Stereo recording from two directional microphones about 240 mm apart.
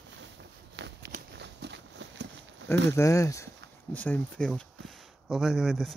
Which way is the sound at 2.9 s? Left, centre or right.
Centre.